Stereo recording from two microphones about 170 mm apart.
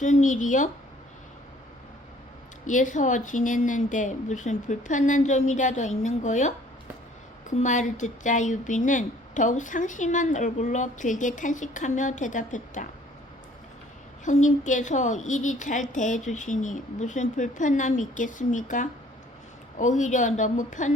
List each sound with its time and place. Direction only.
0.0 s speech: 45° left (ahead or behind)
2.6 s speech: 50° left (ahead or behind)
14.3 s speech: 45° left (ahead or behind)